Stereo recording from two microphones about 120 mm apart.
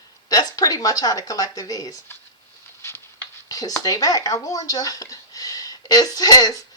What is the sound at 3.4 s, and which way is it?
A man's voice, 30° left (ahead or behind).